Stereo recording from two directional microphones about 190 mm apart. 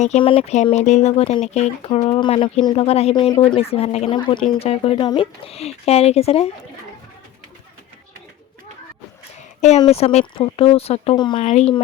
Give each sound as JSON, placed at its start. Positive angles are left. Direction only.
{"t": 0.0, "sound": "speech", "side_deg": 30}
{"t": 9.6, "sound": "speech", "side_deg": 35}